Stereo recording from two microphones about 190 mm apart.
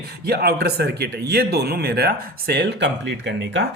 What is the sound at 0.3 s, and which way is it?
Speech, 55° right (ahead or behind).